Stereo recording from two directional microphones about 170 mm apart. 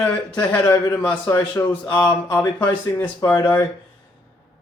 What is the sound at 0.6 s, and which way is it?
Speech, 20° left (ahead or behind).